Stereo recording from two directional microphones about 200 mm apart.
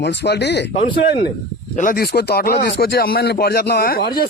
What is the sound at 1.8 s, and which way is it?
Speech, 45° left (ahead or behind).